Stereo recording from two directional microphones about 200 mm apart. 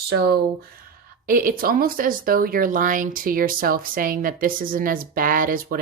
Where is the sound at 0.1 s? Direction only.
50° right (ahead or behind).